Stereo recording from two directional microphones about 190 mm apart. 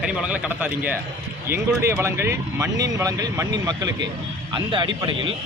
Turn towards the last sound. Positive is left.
turn(degrees=-25)  # may be behind; listen again after turning